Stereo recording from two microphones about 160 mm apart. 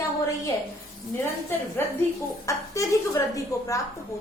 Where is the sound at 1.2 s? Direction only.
15° left (ahead or behind).